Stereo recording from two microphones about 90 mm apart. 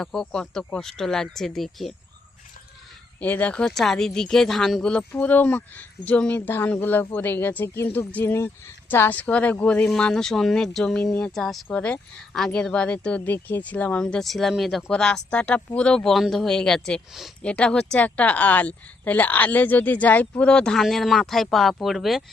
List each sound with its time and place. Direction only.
0.0 s speech: 5° left (ahead or behind)
3.2 s speech: 20° left (ahead or behind)
8.2 s speech: 30° left (ahead or behind); by 17.3 s centre (ahead or behind)
17.4 s speech: 10° left (ahead or behind)